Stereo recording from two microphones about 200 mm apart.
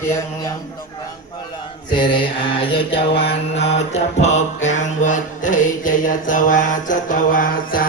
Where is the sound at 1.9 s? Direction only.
25° left (ahead or behind).